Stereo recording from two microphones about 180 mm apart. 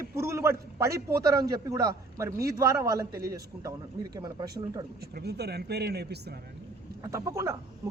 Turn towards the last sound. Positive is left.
turn(degrees=-15)  # may be behind; listen again after turning